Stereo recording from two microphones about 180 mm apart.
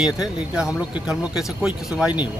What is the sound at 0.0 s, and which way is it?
Speech, 5° right (ahead or behind).